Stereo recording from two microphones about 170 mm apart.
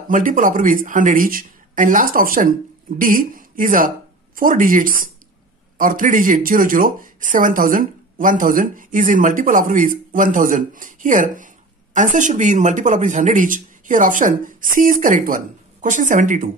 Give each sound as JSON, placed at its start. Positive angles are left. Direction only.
{"t": 0.1, "sound": "speech", "side_deg": -50}